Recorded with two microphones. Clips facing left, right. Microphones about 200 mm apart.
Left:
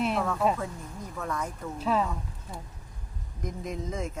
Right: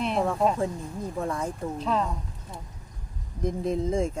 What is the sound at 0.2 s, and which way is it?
Speech, 30° right (ahead or behind).